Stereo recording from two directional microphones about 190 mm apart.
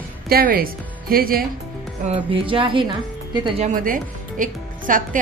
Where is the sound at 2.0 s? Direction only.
30° right (ahead or behind).